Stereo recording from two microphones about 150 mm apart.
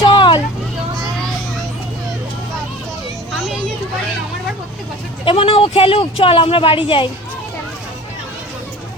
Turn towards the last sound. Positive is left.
turn(degrees=35)  # may be behind; listen again after turning